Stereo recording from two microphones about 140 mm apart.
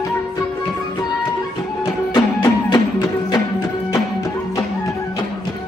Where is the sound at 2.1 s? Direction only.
30° left (ahead or behind).